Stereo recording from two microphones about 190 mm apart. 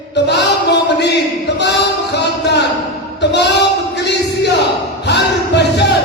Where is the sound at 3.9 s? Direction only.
60° left (ahead or behind).